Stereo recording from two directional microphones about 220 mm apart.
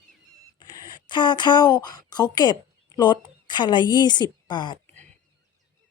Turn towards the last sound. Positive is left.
turn(degrees=20)  # may be behind; listen again after turning